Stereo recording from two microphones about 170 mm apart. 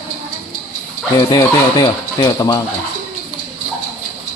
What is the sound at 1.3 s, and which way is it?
Speech, 20° left (ahead or behind).